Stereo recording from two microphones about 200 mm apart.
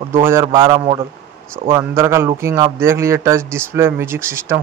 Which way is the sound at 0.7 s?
30° right (ahead or behind).